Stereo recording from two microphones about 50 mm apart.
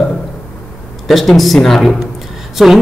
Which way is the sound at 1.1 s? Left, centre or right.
Centre.